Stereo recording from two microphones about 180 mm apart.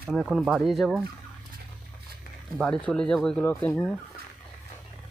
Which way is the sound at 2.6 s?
5° left (ahead or behind).